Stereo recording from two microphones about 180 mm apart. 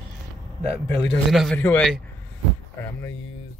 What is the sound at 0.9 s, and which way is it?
Speech, 5° left (ahead or behind).